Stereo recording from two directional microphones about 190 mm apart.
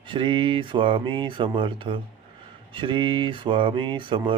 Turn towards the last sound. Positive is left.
turn(degrees=-25)  # may be behind; listen again after turning